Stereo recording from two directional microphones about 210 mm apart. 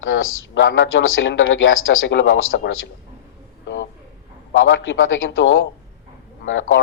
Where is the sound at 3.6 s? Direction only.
60° left (ahead or behind).